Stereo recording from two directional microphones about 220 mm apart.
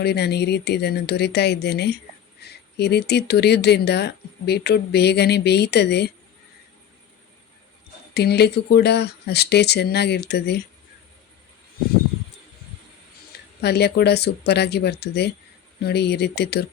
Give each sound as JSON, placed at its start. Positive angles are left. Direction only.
{"t": 0.0, "sound": "speech", "side_deg": 50}
{"t": 8.1, "sound": "speech", "side_deg": 50}
{"t": 13.6, "sound": "speech", "side_deg": 50}